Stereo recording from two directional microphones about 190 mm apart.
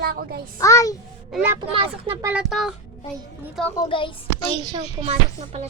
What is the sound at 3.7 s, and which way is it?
Speech, 25° left (ahead or behind).